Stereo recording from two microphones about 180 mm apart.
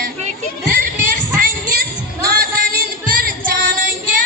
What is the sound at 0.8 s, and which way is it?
Music, 50° right (ahead or behind).